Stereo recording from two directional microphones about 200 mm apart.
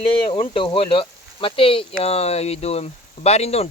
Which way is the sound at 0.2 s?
25° left (ahead or behind).